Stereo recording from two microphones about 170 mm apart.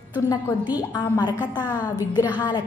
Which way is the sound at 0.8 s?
25° left (ahead or behind).